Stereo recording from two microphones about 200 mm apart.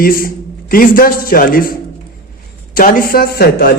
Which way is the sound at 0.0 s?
45° left (ahead or behind).